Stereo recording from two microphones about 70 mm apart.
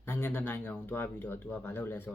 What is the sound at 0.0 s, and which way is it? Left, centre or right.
Speech, left.